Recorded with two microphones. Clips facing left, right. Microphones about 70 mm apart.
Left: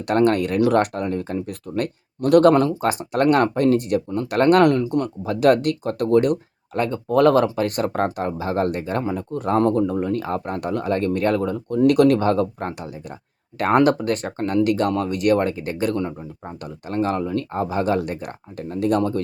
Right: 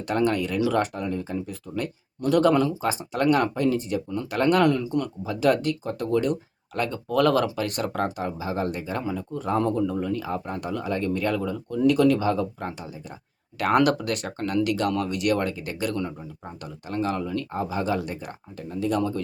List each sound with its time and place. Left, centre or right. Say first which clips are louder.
0.0 s speech: left 6 dB; left
6.7 s speech: left 5 dB; left
13.6 s speech: left 4 dB; left